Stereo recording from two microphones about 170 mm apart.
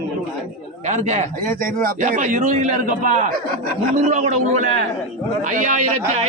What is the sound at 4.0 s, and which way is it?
A man's voice, 45° right (ahead or behind).